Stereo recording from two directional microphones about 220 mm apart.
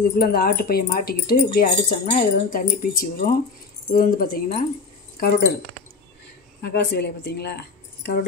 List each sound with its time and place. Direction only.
0.1 s speech: 45° left (ahead or behind)
6.6 s speech: 50° left (ahead or behind)